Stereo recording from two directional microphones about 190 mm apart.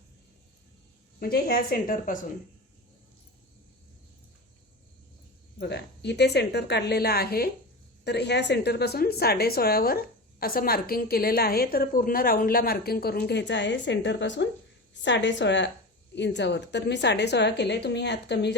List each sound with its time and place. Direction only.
1.2 s a woman's voice: 55° left (ahead or behind)
5.5 s a woman's voice: 60° left (ahead or behind)